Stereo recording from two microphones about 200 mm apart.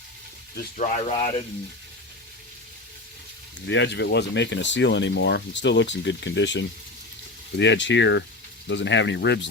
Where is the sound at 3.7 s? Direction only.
60° left (ahead or behind).